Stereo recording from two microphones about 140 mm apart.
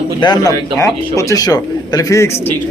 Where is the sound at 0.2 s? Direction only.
30° left (ahead or behind).